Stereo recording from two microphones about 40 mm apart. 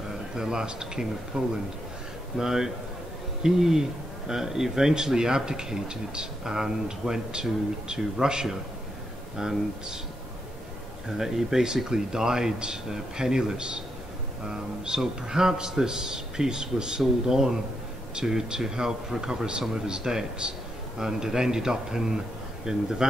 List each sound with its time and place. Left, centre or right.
0.1 s speech: centre
11.1 s speech: centre